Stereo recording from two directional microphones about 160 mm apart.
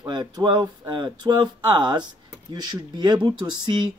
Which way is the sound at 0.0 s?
25° right (ahead or behind).